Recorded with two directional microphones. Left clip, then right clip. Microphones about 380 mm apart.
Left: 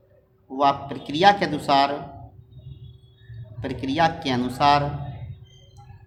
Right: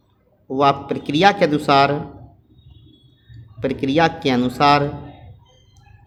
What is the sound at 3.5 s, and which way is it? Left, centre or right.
Speech, centre.